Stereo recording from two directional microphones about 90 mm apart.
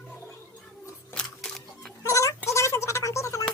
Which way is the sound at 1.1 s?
5° left (ahead or behind).